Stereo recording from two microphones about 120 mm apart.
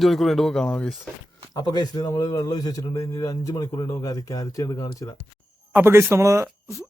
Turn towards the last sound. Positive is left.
turn(degrees=-25)  # may be behind; listen again after turning